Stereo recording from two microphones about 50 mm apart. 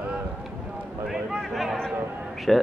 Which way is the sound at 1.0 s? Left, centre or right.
Centre.